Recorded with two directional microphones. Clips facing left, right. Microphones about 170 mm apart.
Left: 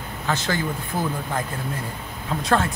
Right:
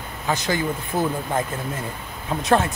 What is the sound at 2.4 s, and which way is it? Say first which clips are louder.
Speech: right 2 dB; 20° right (ahead or behind).